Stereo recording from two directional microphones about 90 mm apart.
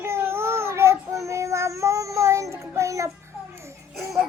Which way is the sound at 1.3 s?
35° right (ahead or behind).